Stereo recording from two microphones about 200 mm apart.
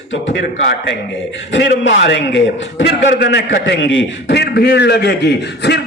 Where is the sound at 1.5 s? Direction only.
65° left (ahead or behind).